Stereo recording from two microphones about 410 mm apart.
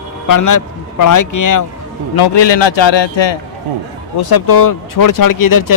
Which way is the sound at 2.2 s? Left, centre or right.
Left.